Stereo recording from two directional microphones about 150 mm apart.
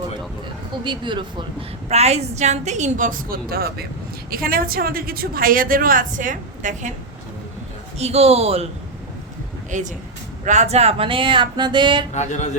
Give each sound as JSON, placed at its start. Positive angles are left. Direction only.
{"t": 0.9, "sound": "speech", "side_deg": -30}
{"t": 1.9, "sound": "a woman's voice", "side_deg": -45}
{"t": 4.3, "sound": "a woman's voice", "side_deg": -75}
{"t": 7.9, "sound": "a woman's voice", "side_deg": -45}
{"t": 9.6, "sound": "speech", "side_deg": -55}
{"t": 12.1, "sound": "speech", "side_deg": 50}